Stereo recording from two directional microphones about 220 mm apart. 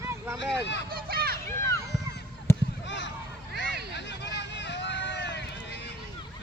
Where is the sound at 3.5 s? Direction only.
50° left (ahead or behind).